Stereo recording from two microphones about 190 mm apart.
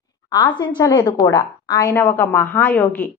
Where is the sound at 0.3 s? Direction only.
25° left (ahead or behind).